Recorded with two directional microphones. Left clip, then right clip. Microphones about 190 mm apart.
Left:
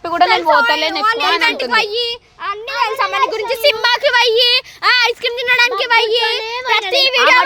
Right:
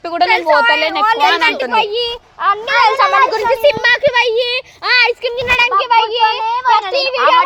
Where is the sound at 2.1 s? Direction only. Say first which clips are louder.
Right 7 dB; 35° left (ahead or behind).